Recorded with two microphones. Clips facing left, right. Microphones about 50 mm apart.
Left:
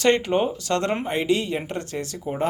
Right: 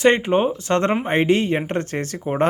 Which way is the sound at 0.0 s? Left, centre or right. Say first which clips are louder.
Right 3 dB; right.